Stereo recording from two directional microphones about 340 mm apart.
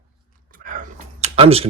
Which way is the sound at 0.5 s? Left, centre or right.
Right.